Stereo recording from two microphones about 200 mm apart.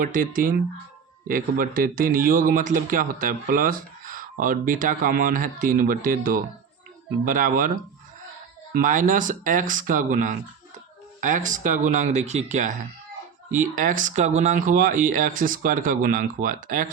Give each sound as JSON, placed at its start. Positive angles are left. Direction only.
{"t": 0.0, "sound": "a man's voice", "side_deg": -40}
{"t": 8.7, "sound": "a man's voice", "side_deg": -40}